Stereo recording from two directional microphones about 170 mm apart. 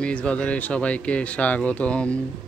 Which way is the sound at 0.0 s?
5° left (ahead or behind).